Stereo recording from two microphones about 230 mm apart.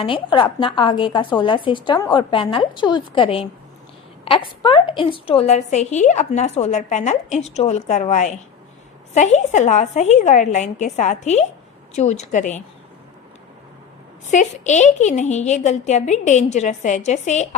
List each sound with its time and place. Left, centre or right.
0.0 s a woman's voice: left
14.3 s a woman's voice: left